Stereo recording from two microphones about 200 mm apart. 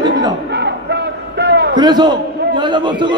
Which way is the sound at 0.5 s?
60° right (ahead or behind).